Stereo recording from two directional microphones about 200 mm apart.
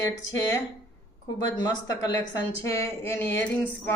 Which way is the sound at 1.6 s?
20° left (ahead or behind).